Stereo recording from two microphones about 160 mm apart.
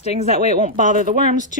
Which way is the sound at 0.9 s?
55° right (ahead or behind).